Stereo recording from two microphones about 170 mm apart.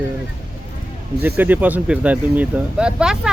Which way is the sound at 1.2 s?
10° right (ahead or behind).